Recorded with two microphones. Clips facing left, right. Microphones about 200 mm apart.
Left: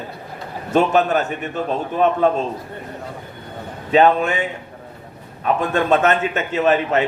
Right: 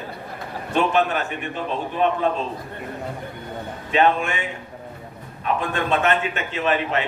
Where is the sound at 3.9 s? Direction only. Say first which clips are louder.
Left 5 dB; 40° left (ahead or behind).